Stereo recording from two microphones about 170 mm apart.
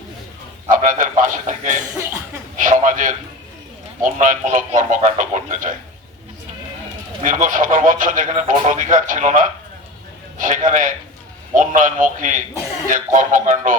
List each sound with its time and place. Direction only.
0.7 s speech: 50° right (ahead or behind)
7.2 s a man's voice: 50° right (ahead or behind)